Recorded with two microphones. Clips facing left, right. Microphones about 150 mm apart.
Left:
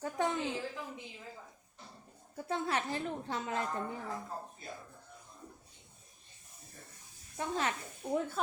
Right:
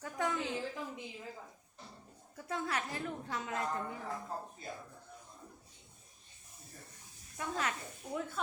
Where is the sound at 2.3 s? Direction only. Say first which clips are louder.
Left 3 dB; 30° left (ahead or behind).